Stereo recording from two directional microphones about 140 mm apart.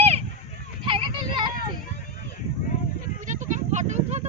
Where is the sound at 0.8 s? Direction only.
40° right (ahead or behind).